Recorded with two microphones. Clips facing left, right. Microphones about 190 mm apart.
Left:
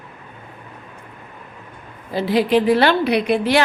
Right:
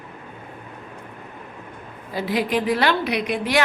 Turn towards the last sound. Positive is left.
turn(degrees=30)  # may be behind; listen again after turning